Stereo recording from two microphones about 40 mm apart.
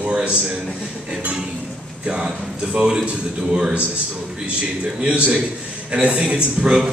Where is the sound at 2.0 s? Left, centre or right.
Right.